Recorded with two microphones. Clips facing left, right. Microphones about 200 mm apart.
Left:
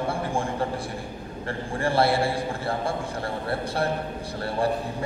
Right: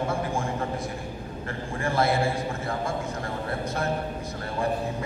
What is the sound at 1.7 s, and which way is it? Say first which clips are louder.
A man's voice: left 2 dB; 30° left (ahead or behind).